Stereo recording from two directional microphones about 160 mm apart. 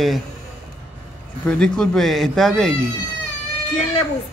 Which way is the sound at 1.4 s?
5° left (ahead or behind).